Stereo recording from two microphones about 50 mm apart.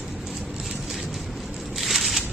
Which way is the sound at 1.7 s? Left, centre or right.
Centre.